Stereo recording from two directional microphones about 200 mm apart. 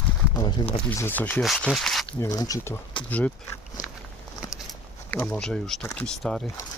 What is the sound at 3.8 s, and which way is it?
Walk, 40° left (ahead or behind).